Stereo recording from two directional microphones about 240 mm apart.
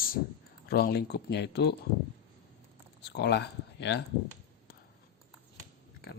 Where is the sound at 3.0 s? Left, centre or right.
Left.